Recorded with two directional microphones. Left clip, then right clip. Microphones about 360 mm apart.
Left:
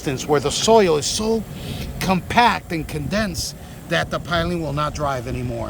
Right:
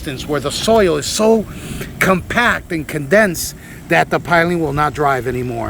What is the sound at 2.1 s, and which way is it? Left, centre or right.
Speech, centre.